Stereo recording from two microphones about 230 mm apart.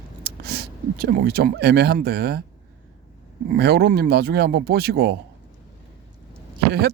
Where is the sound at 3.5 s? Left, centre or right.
Right.